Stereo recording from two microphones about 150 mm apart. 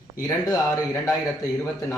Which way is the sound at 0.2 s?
25° left (ahead or behind).